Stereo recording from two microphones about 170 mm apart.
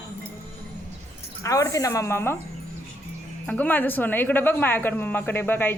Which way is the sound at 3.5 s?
10° left (ahead or behind).